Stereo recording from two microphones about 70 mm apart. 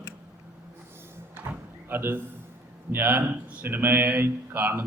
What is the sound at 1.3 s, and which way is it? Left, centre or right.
Drawer open or close, right.